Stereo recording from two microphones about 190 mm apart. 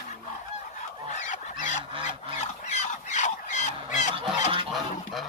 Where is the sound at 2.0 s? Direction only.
40° left (ahead or behind).